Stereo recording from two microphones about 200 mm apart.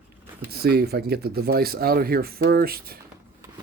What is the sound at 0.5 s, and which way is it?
Speech, 50° right (ahead or behind).